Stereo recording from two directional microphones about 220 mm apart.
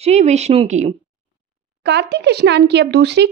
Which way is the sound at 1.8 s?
50° right (ahead or behind).